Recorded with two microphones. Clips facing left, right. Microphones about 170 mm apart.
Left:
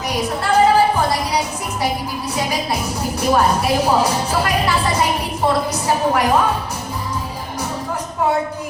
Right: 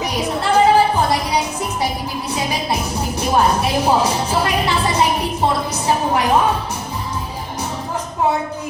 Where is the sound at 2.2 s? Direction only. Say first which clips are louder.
Even; 20° right (ahead or behind).